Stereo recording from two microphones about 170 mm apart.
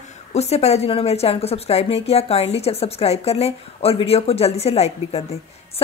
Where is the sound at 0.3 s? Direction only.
40° left (ahead or behind).